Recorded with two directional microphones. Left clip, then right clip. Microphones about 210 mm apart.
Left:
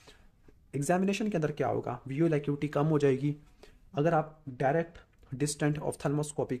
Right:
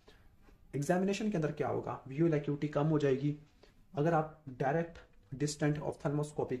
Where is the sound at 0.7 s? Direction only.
35° left (ahead or behind).